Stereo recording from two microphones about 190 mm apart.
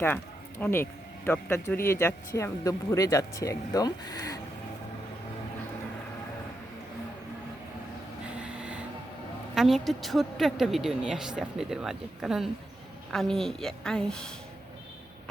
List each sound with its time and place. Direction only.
0.6 s speech: 10° left (ahead or behind)
8.4 s a sound: 5° right (ahead or behind)
9.6 s a woman's voice: centre (ahead or behind)